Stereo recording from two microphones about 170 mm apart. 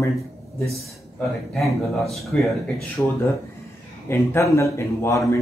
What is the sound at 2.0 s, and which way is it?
Speech, centre (ahead or behind).